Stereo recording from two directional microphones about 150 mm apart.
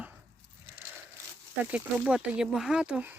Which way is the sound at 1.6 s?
10° right (ahead or behind).